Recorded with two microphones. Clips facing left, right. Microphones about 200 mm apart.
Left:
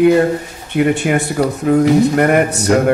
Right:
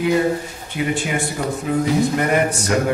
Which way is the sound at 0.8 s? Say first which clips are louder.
Left 8 dB; 60° left (ahead or behind).